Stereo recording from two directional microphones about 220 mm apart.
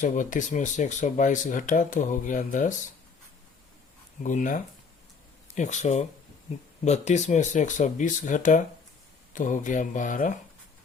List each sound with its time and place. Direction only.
0.0 s speech: 35° left (ahead or behind)
4.2 s speech: 35° left (ahead or behind)